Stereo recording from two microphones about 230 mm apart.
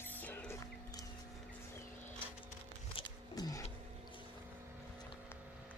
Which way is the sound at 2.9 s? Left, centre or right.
Centre.